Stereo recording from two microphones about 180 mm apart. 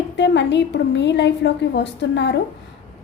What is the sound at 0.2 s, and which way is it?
A woman's voice, 75° left (ahead or behind).